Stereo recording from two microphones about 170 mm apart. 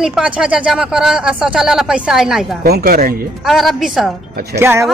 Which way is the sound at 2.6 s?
65° right (ahead or behind).